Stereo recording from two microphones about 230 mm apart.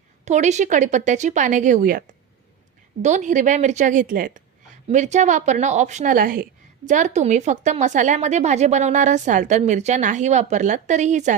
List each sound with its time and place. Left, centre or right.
0.3 s a woman's voice: right